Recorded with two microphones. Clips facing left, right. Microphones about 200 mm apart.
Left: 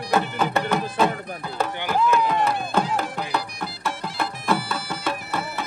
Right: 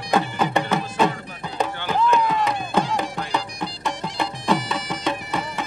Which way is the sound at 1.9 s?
5° left (ahead or behind).